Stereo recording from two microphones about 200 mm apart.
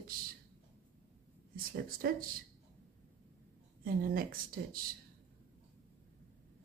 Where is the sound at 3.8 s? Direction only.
45° right (ahead or behind).